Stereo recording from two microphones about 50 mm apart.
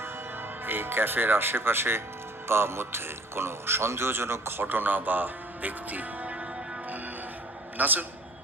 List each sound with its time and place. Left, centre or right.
0.6 s speech: right
7.8 s a man's voice: right